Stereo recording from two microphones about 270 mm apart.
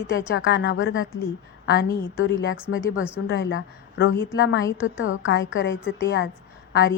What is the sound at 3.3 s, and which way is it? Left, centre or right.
A woman's voice, left.